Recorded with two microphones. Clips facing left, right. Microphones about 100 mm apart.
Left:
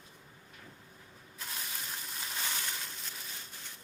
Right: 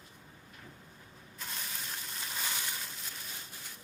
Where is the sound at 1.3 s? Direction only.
Centre (ahead or behind).